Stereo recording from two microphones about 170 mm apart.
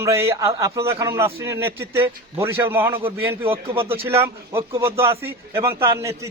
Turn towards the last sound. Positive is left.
turn(degrees=-20)  # may be behind; listen again after turning